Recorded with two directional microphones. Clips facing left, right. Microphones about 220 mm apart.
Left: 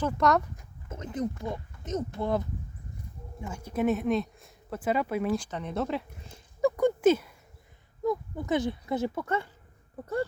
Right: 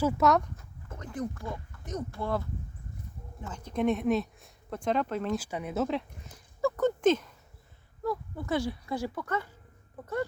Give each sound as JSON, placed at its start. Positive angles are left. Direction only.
{"t": 0.0, "sound": "speech", "side_deg": 0}
{"t": 0.5, "sound": "speech", "side_deg": 20}
{"t": 5.4, "sound": "speech", "side_deg": -10}
{"t": 6.2, "sound": "a sound", "side_deg": 20}
{"t": 8.0, "sound": "speech", "side_deg": 20}